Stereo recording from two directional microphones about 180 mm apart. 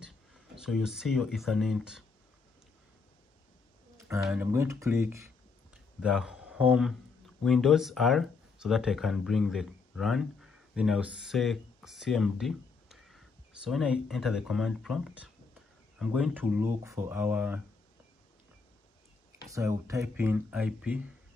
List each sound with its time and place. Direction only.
0.6 s speech: centre (ahead or behind)
4.2 s speech: 5° right (ahead or behind)
5.9 s speech: 5° right (ahead or behind)
19.4 s speech: 20° right (ahead or behind)